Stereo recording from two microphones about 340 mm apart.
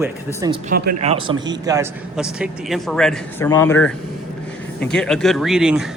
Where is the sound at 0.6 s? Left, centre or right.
Right; by 5.8 s centre.